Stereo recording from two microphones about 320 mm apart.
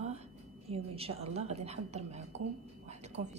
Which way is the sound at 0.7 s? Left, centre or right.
Centre.